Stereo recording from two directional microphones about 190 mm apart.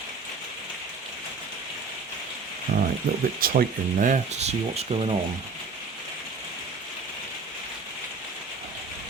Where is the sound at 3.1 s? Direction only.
50° right (ahead or behind); by 5.1 s 30° right (ahead or behind).